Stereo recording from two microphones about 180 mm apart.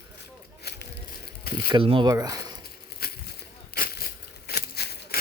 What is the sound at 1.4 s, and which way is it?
Speech, 60° left (ahead or behind).